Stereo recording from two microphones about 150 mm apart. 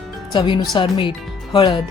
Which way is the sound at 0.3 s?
30° left (ahead or behind).